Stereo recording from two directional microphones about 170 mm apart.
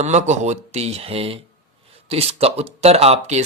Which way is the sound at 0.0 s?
40° right (ahead or behind).